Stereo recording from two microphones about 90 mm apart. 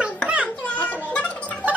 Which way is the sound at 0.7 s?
15° left (ahead or behind).